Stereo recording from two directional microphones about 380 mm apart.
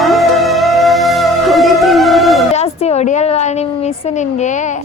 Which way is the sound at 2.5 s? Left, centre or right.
Centre.